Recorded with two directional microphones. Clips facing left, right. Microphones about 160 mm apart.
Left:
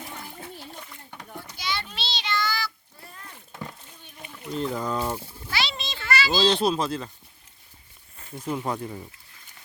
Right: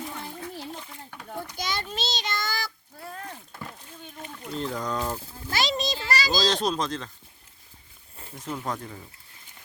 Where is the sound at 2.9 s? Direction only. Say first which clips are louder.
Right 8 dB; 90° right.